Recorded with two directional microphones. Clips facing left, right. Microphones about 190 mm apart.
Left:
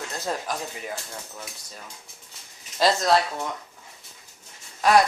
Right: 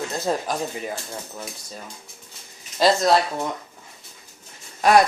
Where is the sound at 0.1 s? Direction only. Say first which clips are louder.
Right 3 dB; 30° right (ahead or behind).